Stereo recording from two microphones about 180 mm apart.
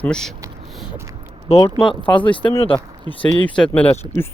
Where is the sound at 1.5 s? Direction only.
35° left (ahead or behind).